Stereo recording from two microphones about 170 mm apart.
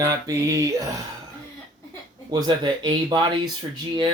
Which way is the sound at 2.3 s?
25° right (ahead or behind).